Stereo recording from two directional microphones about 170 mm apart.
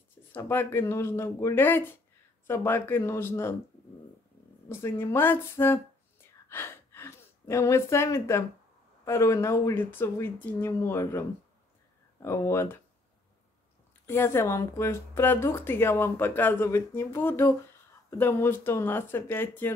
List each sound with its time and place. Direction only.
0.3 s speech: 10° left (ahead or behind)
4.6 s speech: 15° left (ahead or behind)
6.2 s a sound: 15° left (ahead or behind)
9.0 s speech: 15° left (ahead or behind)
14.0 s speech: 15° left (ahead or behind)